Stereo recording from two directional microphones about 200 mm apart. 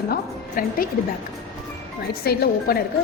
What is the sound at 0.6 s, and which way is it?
Speech, 45° left (ahead or behind).